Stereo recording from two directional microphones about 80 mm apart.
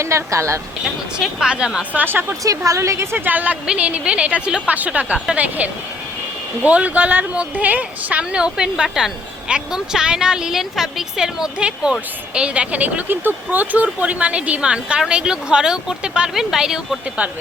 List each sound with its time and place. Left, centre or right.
0.0 s a woman's voice: right
1.2 s speech: centre
1.9 s speech: right
2.4 s a woman's voice: right; by 17.2 s centre